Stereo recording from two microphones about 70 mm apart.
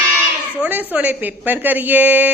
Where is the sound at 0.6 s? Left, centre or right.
Right.